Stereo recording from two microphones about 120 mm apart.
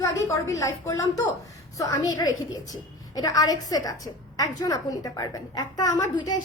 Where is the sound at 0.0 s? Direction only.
25° left (ahead or behind).